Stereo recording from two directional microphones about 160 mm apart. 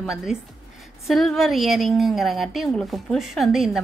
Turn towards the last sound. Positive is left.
turn(degrees=0)  # may be behind; listen again after turning